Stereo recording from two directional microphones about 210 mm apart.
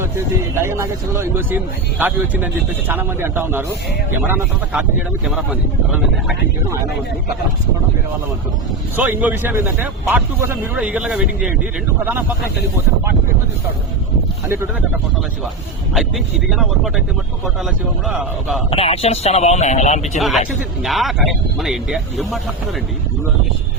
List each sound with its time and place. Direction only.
0.6 s speech: 10° right (ahead or behind)
9.0 s speech: 10° right (ahead or behind)
16.0 s speech: centre (ahead or behind)
18.0 s speech: 5° right (ahead or behind)
18.7 s speech: 30° left (ahead or behind)
20.1 s speech: centre (ahead or behind)